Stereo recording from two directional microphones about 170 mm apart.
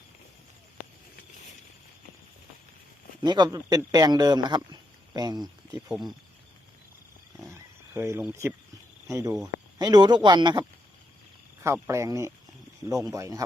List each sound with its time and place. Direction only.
3.2 s speech: 25° right (ahead or behind)
5.9 s speech: centre (ahead or behind)
7.5 s a sound: 15° right (ahead or behind)
9.0 s speech: 20° right (ahead or behind)